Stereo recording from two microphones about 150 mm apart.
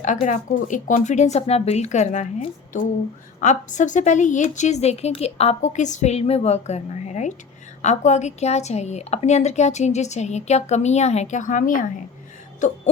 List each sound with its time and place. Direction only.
0.0 s speech: 55° left (ahead or behind)
12.5 s music: 55° left (ahead or behind)